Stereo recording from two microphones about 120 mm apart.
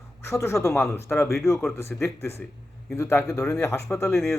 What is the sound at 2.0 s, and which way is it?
Speech, 20° left (ahead or behind).